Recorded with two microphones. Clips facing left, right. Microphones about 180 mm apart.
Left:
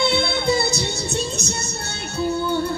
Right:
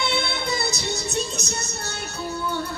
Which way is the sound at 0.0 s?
30° left (ahead or behind).